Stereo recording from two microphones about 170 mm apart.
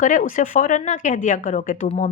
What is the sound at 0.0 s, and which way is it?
Speech, 50° left (ahead or behind).